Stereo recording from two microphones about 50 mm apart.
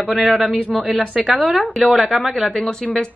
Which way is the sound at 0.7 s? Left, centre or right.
Right.